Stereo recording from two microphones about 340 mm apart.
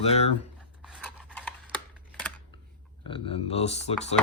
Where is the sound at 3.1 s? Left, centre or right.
Centre.